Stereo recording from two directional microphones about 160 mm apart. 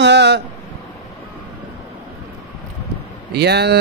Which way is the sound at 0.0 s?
90° right.